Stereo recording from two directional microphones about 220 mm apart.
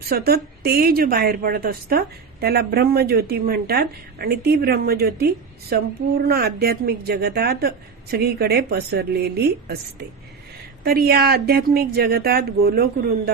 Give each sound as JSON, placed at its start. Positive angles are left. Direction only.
{"t": 0.1, "sound": "a woman's voice", "side_deg": -45}
{"t": 10.8, "sound": "a woman's voice", "side_deg": -45}